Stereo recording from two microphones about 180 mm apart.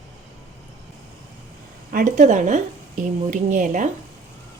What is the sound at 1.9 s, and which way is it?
Speech, 45° right (ahead or behind).